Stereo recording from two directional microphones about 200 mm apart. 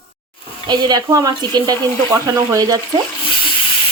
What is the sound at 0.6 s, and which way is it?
Speech, 20° right (ahead or behind).